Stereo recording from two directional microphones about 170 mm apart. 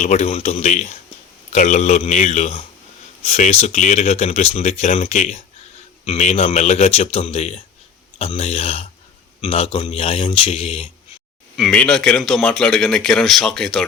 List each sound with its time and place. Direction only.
0.0 s speech: 40° left (ahead or behind)
11.5 s speech: 5° left (ahead or behind)